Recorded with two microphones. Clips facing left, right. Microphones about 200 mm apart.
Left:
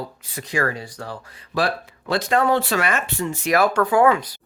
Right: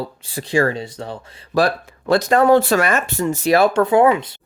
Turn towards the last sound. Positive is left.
turn(degrees=-25)  # may be behind; listen again after turning